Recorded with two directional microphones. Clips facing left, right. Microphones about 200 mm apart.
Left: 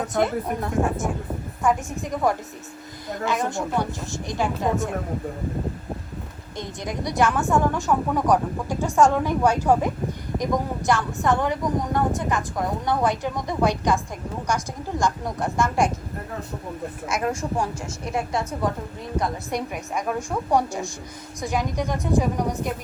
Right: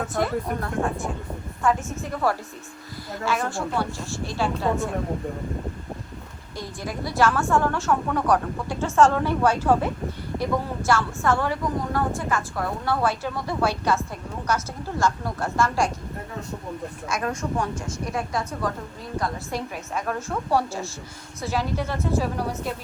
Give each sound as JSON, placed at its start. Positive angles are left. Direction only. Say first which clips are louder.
{"t": 0.7, "sound": "speech", "louder": "left 4 dB", "side_deg": 0}
{"t": 1.6, "sound": "a woman's voice", "louder": "left 1 dB", "side_deg": 15}
{"t": 6.6, "sound": "a woman's voice", "louder": "left 1 dB", "side_deg": 20}
{"t": 17.1, "sound": "a woman's voice", "louder": "left 1 dB", "side_deg": 20}